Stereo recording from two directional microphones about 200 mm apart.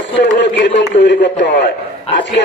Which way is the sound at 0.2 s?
60° left (ahead or behind).